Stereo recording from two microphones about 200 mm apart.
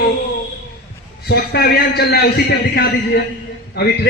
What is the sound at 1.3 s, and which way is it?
A man's voice, 55° left (ahead or behind).